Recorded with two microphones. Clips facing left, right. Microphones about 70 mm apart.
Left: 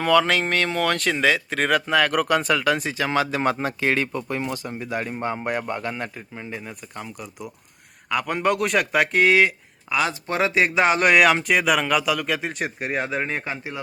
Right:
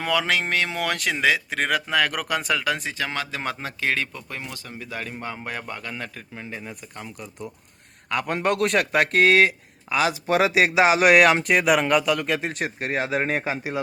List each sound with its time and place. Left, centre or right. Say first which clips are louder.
0.0 s speech: left 5 dB; centre
3.5 s speech: left 4 dB; left
6.3 s speech: left 1 dB; centre
10.1 s speech: right 3 dB; centre
13.2 s a man's voice: right 3 dB; centre